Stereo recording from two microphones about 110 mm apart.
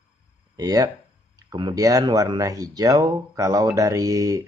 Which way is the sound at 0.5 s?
35° right (ahead or behind).